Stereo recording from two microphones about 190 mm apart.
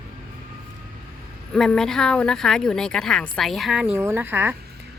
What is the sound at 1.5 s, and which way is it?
Speech, centre (ahead or behind).